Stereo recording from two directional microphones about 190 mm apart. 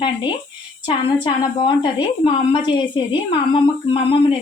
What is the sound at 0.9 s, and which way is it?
A woman's voice, 25° left (ahead or behind).